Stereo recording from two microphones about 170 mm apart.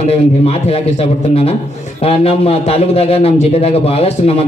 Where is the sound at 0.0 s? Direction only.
35° left (ahead or behind).